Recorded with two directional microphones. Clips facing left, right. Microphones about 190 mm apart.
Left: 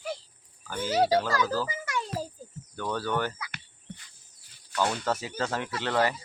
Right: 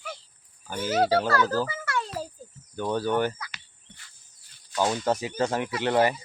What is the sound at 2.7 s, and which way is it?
Speech, 15° right (ahead or behind).